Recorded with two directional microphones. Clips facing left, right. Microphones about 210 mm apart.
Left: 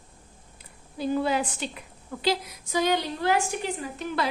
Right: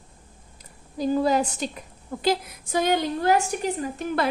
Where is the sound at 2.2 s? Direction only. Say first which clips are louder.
Right 3 dB; 50° right (ahead or behind).